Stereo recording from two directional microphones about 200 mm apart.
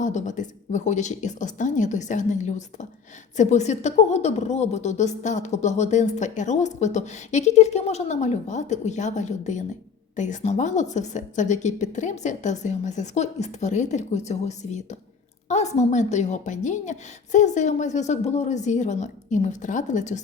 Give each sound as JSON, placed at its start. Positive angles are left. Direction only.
{"t": 0.0, "sound": "a woman's voice", "side_deg": 35}